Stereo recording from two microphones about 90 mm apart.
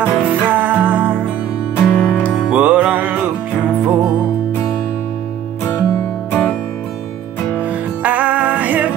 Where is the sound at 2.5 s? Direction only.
15° right (ahead or behind).